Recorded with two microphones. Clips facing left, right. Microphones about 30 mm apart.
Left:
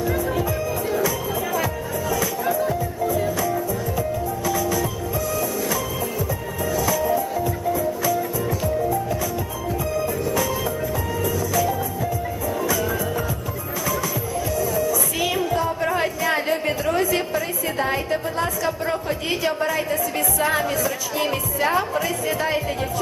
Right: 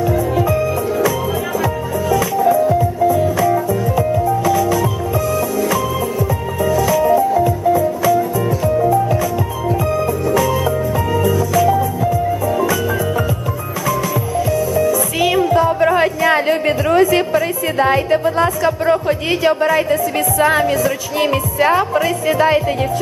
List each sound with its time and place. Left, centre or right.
1.6 s music: right
3.3 s music: right
14.3 s music: right
21.6 s speech: right